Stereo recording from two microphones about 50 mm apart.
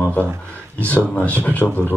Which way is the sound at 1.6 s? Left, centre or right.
Centre.